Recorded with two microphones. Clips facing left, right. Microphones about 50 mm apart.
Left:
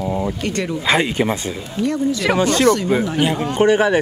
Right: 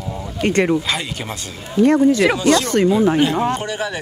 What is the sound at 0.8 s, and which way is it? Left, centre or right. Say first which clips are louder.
Speech: left 7 dB; left.